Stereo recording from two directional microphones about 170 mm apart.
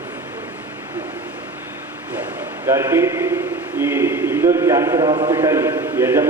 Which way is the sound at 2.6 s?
15° right (ahead or behind).